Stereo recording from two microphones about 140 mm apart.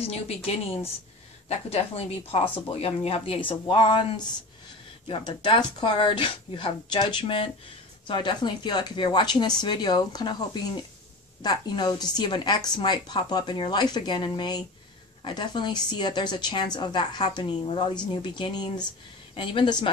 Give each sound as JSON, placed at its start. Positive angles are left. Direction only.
{"t": 0.1, "sound": "a woman's voice", "side_deg": 45}